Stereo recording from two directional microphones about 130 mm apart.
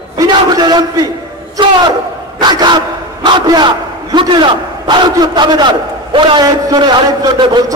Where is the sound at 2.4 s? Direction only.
35° right (ahead or behind).